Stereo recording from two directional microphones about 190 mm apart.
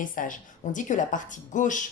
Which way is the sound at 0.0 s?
45° left (ahead or behind).